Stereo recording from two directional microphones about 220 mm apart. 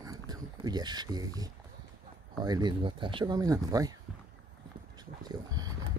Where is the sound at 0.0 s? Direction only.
15° right (ahead or behind).